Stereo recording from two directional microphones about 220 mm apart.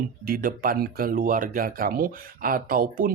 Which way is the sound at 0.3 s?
40° right (ahead or behind).